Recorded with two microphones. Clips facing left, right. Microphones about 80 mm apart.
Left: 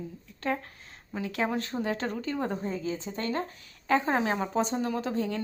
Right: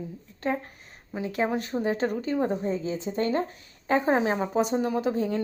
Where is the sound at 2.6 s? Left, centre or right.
Right.